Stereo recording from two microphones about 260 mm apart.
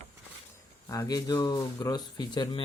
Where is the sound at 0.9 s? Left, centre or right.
Centre.